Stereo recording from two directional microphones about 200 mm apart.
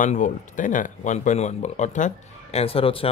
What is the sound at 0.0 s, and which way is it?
Speech, 40° left (ahead or behind).